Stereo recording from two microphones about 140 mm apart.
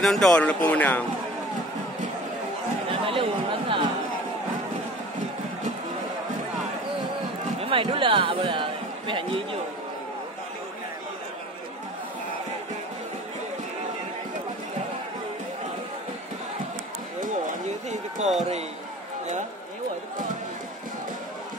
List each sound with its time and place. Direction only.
0.0 s speech: 5° left (ahead or behind)
2.9 s speech: 40° right (ahead or behind)
7.6 s a man's voice: 40° right (ahead or behind)
17.2 s a sound: 60° right (ahead or behind)